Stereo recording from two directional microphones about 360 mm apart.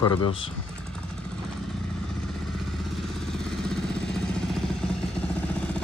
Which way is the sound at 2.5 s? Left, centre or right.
Centre.